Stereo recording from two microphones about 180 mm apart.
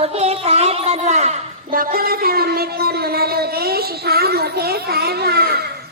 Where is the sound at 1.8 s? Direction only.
55° right (ahead or behind).